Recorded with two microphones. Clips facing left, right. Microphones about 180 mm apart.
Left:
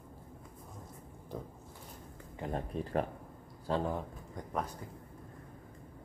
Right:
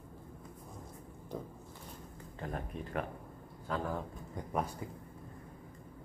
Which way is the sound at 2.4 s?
15° left (ahead or behind).